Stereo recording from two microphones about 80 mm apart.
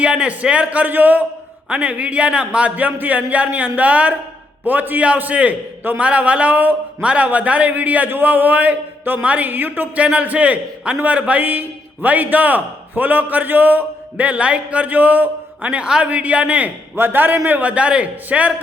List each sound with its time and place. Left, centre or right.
0.0 s a man's voice: centre